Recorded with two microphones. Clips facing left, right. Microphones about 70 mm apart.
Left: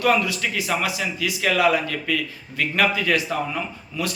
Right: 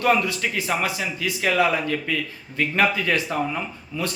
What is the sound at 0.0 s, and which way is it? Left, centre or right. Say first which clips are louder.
A man's voice: even; right.